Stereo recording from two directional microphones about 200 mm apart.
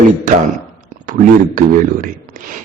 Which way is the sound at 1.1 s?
45° right (ahead or behind).